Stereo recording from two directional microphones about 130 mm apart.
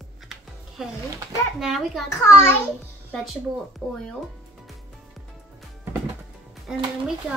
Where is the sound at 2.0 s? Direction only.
20° left (ahead or behind).